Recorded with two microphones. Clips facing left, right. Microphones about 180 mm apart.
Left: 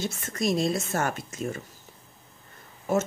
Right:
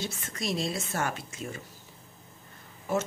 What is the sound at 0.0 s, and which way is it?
Speech, 45° left (ahead or behind).